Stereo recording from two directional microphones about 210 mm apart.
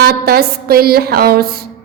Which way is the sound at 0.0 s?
45° right (ahead or behind).